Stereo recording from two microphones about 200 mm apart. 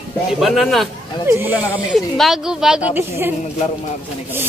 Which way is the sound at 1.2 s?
10° right (ahead or behind).